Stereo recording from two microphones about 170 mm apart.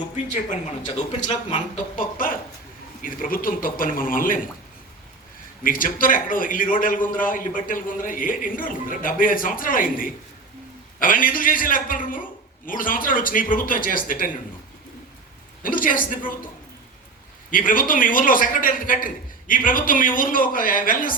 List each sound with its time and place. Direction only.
0.9 s speech: 40° left (ahead or behind)
2.0 s a man's voice: 55° left (ahead or behind)
5.6 s a man's voice: 55° left (ahead or behind)
15.6 s a man's voice: 55° left (ahead or behind)
17.5 s a man's voice: 55° left (ahead or behind)